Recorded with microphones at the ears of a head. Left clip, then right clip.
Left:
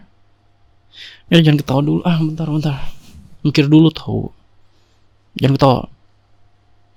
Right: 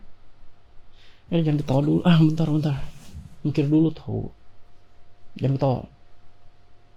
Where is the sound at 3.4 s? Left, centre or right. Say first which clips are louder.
Left 9 dB; left.